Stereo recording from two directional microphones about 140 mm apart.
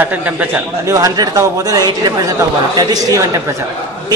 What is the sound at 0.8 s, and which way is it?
A man's voice, 25° right (ahead or behind).